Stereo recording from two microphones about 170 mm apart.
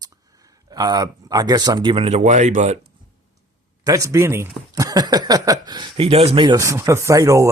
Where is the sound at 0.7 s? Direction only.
25° right (ahead or behind); by 2.8 s 40° right (ahead or behind).